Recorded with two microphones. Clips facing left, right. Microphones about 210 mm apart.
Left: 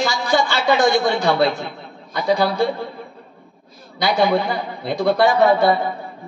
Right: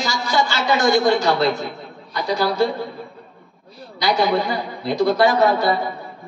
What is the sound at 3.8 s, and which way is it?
A woman's voice, 55° left (ahead or behind).